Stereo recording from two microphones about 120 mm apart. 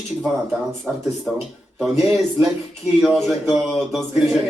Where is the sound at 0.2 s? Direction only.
Centre (ahead or behind).